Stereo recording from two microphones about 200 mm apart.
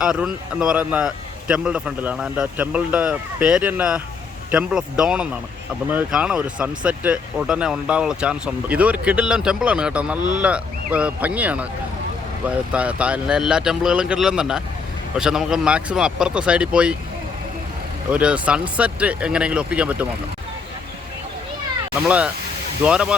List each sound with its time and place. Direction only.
0.0 s speech: 5° right (ahead or behind)
10.2 s speech: 40° right (ahead or behind)
10.4 s speech: 5° right (ahead or behind)
12.7 s speech: 5° right (ahead or behind)
18.1 s speech: 5° right (ahead or behind)
22.8 s speech: 5° right (ahead or behind)